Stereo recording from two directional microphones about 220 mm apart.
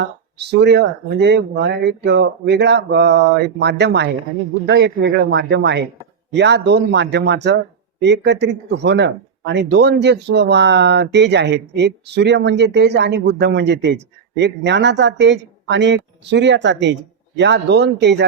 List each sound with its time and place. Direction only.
0.0 s speech: 50° right (ahead or behind)